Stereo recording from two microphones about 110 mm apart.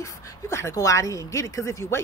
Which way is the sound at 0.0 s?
25° left (ahead or behind).